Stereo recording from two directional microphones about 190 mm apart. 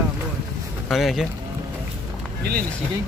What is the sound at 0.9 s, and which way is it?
Speech, centre (ahead or behind).